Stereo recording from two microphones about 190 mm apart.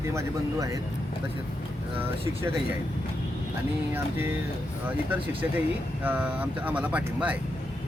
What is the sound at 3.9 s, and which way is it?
Speech, 10° right (ahead or behind).